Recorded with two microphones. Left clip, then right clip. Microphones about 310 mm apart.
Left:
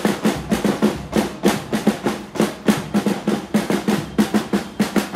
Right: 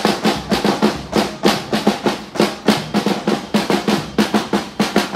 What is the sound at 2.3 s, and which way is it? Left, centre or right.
Drum, centre.